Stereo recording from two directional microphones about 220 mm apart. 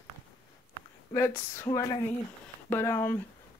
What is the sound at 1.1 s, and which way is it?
Speech, 10° left (ahead or behind).